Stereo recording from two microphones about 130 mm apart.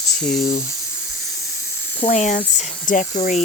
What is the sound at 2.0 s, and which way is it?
Speech, 65° left (ahead or behind).